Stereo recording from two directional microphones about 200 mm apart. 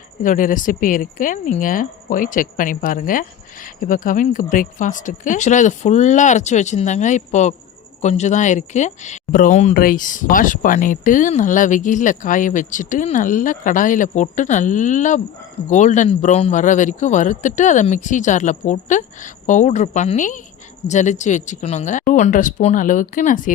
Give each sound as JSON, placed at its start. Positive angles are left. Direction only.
{"t": 0.2, "sound": "speech", "side_deg": 40}